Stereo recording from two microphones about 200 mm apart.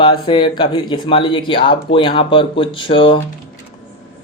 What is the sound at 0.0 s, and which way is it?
Speech, 25° left (ahead or behind).